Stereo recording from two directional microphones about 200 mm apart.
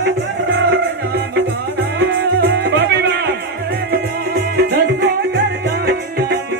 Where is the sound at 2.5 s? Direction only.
55° right (ahead or behind).